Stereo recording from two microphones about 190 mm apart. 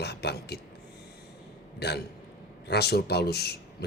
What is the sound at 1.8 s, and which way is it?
Speech, 60° left (ahead or behind).